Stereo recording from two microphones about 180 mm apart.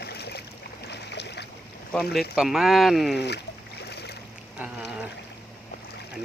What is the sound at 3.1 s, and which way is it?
Speech, 70° left (ahead or behind).